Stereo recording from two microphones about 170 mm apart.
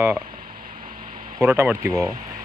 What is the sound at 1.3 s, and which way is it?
Speech, 15° right (ahead or behind).